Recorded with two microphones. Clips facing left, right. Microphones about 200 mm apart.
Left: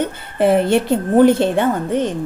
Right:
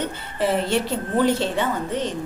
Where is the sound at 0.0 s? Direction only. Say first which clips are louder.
Left 7 dB; 55° left (ahead or behind).